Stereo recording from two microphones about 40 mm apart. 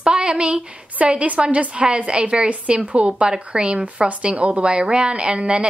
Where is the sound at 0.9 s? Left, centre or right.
Right.